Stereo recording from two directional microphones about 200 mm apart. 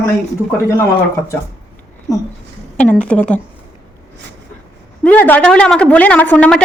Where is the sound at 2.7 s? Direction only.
5° left (ahead or behind).